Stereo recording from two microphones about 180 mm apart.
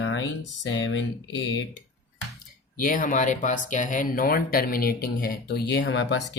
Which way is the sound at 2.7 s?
50° left (ahead or behind).